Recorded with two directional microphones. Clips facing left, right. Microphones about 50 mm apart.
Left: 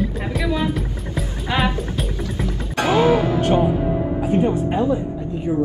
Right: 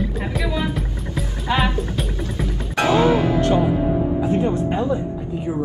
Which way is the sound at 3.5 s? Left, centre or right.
Left.